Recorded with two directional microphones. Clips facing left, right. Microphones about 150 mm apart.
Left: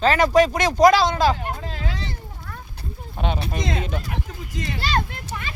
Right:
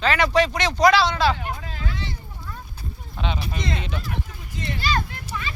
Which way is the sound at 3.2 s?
45° left (ahead or behind).